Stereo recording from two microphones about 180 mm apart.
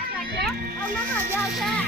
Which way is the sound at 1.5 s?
Centre (ahead or behind).